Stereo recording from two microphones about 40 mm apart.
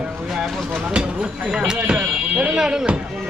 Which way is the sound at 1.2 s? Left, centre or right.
Centre.